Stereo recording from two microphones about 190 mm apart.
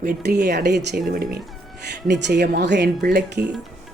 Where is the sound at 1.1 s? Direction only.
50° right (ahead or behind).